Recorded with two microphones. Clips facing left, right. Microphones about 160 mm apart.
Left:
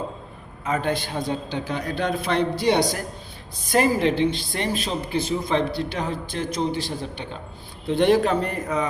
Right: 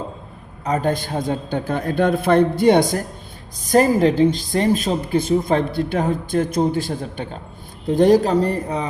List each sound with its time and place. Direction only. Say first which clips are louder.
0.6 s a woman's voice: right 4 dB; 40° right (ahead or behind)